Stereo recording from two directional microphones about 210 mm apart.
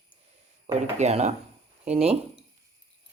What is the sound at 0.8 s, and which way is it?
Speech, 30° right (ahead or behind).